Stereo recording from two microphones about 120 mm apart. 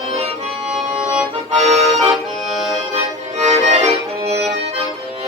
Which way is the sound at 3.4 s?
75° right (ahead or behind).